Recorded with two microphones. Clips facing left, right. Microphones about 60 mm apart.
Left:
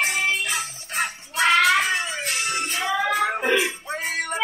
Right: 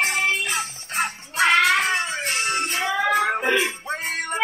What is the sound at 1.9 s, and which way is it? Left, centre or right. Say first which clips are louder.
Music: right 2 dB; right.